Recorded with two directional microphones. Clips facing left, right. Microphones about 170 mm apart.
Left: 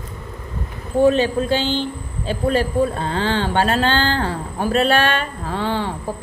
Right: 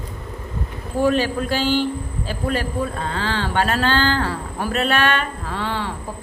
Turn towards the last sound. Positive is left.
turn(degrees=30)  # may be behind; listen again after turning